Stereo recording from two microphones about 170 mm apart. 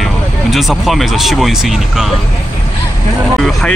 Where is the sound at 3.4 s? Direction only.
Centre (ahead or behind).